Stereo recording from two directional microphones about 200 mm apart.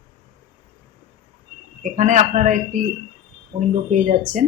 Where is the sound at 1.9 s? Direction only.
35° right (ahead or behind).